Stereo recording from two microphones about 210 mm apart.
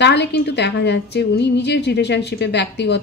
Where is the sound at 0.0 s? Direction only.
55° left (ahead or behind).